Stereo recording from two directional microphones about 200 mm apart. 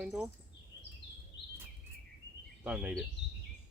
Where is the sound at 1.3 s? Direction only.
60° left (ahead or behind).